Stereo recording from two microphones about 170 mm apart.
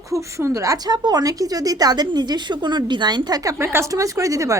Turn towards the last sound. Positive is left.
turn(degrees=-20)  # may be behind; listen again after turning